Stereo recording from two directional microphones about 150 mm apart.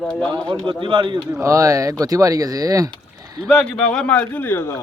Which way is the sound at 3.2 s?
25° right (ahead or behind).